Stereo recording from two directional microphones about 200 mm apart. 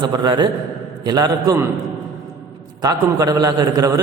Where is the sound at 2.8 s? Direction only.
20° right (ahead or behind).